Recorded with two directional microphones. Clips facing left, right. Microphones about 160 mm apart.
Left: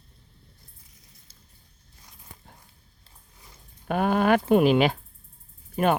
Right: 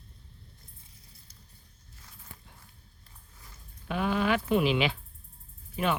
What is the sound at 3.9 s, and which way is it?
Speech, 50° left (ahead or behind).